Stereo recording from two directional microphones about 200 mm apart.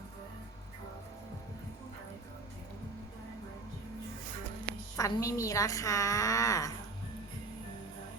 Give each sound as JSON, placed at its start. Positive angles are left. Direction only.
{"t": 4.9, "sound": "a woman's voice", "side_deg": 15}